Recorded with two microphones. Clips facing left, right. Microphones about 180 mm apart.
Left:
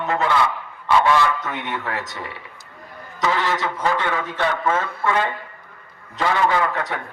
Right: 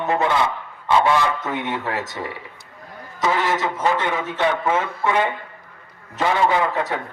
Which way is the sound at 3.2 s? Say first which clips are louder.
Right 1 dB; 20° right (ahead or behind).